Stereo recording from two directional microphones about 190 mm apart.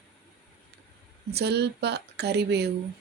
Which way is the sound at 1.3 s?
60° right (ahead or behind).